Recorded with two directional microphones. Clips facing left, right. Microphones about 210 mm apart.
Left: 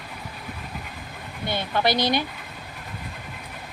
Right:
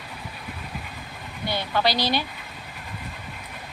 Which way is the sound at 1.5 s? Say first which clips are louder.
Left 1 dB; 20° left (ahead or behind).